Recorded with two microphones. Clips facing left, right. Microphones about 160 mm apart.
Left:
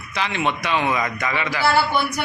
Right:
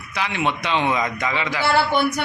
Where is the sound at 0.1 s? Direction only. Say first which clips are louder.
Even; 10° right (ahead or behind).